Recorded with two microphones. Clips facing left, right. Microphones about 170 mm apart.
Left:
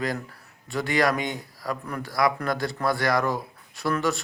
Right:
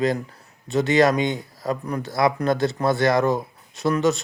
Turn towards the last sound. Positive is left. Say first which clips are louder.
# right 5 dB
turn(degrees=-20)  # may be behind; listen again after turning